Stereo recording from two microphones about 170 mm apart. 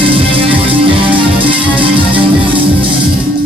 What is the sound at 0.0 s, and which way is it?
Music, 30° right (ahead or behind).